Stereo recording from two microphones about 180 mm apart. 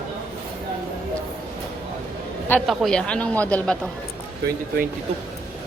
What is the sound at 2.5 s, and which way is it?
Speech, 5° left (ahead or behind).